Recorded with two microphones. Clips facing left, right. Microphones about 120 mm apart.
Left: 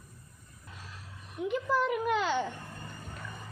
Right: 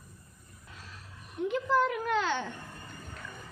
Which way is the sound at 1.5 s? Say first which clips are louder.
Right 1 dB; 5° left (ahead or behind).